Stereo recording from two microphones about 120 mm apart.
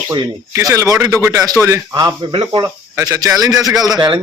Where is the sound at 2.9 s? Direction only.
25° right (ahead or behind).